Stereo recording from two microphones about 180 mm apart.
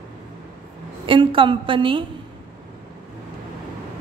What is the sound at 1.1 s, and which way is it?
Speech, 30° right (ahead or behind).